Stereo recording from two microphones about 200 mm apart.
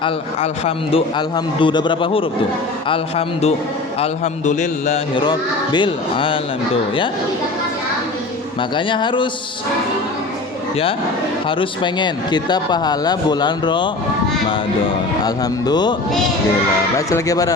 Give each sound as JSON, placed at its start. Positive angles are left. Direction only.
{"t": 0.0, "sound": "a man's voice", "side_deg": 30}
{"t": 5.1, "sound": "speech", "side_deg": 20}
{"t": 8.7, "sound": "speech", "side_deg": 25}
{"t": 11.4, "sound": "speech", "side_deg": 25}
{"t": 15.2, "sound": "speech", "side_deg": 20}
{"t": 17.1, "sound": "speech", "side_deg": 15}